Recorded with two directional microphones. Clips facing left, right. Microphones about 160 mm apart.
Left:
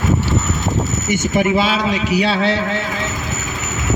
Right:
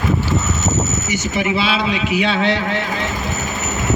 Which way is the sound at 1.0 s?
50° left (ahead or behind).